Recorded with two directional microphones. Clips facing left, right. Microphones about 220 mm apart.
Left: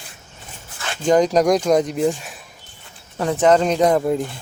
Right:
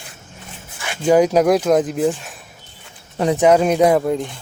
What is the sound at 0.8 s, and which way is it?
Speech, 10° right (ahead or behind).